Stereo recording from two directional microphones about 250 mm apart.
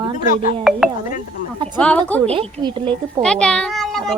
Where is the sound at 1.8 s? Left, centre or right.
Centre.